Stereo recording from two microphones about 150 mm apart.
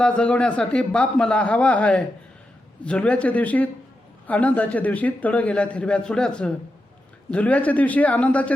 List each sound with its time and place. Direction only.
0.0 s speech: 10° left (ahead or behind)